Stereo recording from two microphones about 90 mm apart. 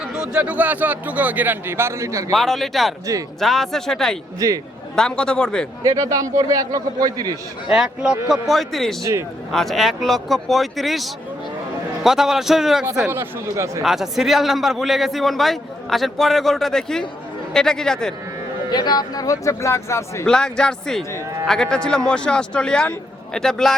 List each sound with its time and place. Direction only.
0.0 s a man's voice: 10° right (ahead or behind); by 2.3 s 35° right (ahead or behind)
2.3 s a man's voice: 5° left (ahead or behind)
4.4 s a man's voice: 40° right (ahead or behind)
4.9 s a man's voice: 10° left (ahead or behind)
5.8 s a man's voice: 40° right (ahead or behind)
7.7 s a man's voice: 5° right (ahead or behind)
13.1 s a man's voice: 30° right (ahead or behind)
13.8 s a man's voice: 5° right (ahead or behind)
18.7 s speech: 50° left (ahead or behind); by 20.2 s 30° left (ahead or behind)
20.2 s a man's voice: 5° left (ahead or behind)